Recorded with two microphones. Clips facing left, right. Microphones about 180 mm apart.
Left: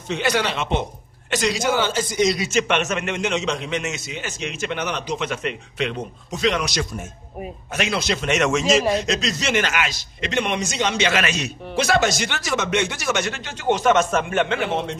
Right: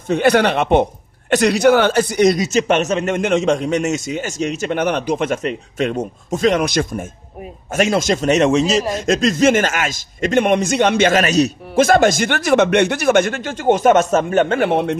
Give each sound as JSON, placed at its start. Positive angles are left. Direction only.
{"t": 0.1, "sound": "a man's voice", "side_deg": -55}
{"t": 2.3, "sound": "a man's voice", "side_deg": -40}
{"t": 3.1, "sound": "a man's voice", "side_deg": -50}
{"t": 8.9, "sound": "a man's voice", "side_deg": -50}
{"t": 14.6, "sound": "a man's voice", "side_deg": -60}